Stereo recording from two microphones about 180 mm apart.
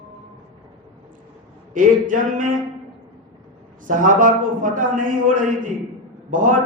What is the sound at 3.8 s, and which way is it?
A man's voice, 45° right (ahead or behind).